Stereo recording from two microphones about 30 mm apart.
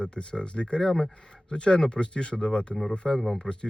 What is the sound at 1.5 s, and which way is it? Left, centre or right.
Speech, left.